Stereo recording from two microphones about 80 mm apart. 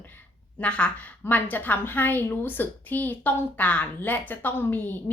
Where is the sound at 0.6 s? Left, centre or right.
Centre.